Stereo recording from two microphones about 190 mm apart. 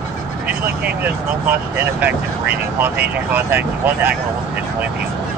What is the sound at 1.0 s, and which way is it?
Speech, 10° right (ahead or behind).